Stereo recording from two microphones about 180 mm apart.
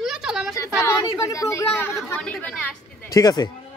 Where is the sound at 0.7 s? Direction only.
15° left (ahead or behind).